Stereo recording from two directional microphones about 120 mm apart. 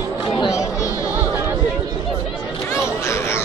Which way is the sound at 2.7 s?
25° left (ahead or behind).